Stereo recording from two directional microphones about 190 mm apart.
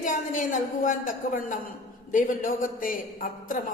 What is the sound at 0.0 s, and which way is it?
A woman's voice, 45° left (ahead or behind).